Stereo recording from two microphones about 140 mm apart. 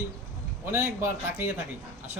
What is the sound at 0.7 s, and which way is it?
Speech, 20° right (ahead or behind).